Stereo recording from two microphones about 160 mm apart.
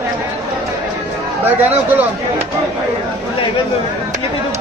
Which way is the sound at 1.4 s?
10° right (ahead or behind).